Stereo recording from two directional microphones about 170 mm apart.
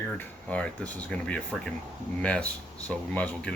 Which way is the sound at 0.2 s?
10° left (ahead or behind).